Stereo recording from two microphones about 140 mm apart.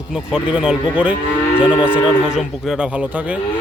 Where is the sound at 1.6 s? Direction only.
35° left (ahead or behind).